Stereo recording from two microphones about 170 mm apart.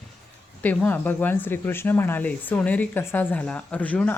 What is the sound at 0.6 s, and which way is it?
Speech, 10° left (ahead or behind).